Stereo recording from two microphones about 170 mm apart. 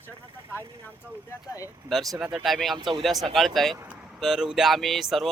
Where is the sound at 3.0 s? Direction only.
Centre (ahead or behind).